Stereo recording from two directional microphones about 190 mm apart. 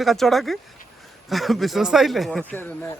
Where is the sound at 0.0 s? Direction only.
Centre (ahead or behind).